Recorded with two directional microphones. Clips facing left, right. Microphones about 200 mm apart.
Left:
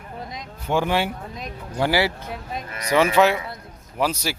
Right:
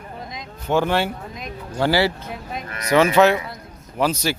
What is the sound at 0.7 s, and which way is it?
Speech, 10° left (ahead or behind).